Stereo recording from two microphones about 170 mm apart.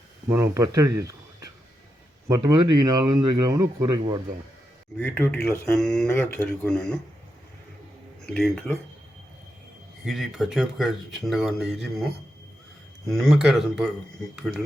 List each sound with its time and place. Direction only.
0.3 s speech: 15° right (ahead or behind)
4.9 s speech: 10° left (ahead or behind)
8.3 s speech: 5° left (ahead or behind)
10.1 s speech: centre (ahead or behind)
13.1 s speech: centre (ahead or behind)